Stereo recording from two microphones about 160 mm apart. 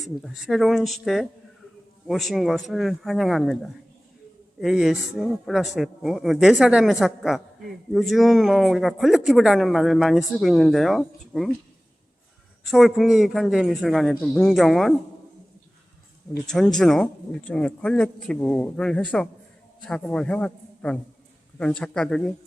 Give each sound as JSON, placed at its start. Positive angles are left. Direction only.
{"t": 0.0, "sound": "speech", "side_deg": 0}
{"t": 12.6, "sound": "speech", "side_deg": 0}
{"t": 16.5, "sound": "a man's voice", "side_deg": 0}